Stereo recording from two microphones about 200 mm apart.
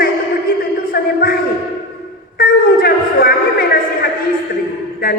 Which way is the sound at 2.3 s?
50° left (ahead or behind).